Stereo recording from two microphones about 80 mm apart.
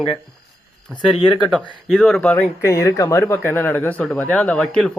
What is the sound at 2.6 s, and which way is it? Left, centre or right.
Speech, left.